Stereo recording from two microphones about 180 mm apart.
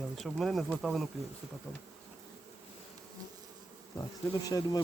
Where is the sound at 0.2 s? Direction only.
Centre (ahead or behind).